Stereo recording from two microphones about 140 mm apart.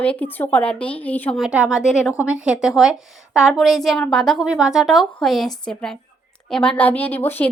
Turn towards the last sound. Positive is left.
turn(degrees=15)  # may be behind; listen again after turning